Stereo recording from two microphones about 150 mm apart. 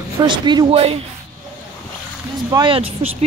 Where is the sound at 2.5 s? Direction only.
30° right (ahead or behind).